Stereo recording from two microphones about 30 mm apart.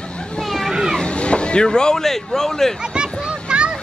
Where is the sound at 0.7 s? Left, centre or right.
Centre.